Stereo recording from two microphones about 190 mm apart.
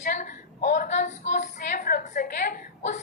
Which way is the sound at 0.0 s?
40° left (ahead or behind).